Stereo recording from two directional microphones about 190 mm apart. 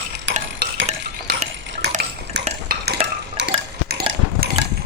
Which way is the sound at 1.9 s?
55° right (ahead or behind).